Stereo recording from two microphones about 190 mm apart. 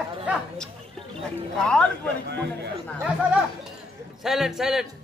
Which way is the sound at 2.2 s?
60° right (ahead or behind).